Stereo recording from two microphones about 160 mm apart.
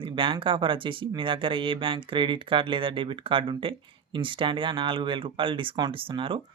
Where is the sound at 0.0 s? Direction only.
35° right (ahead or behind).